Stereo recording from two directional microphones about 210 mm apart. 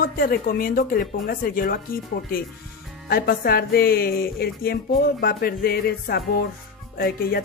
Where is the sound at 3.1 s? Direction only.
45° left (ahead or behind).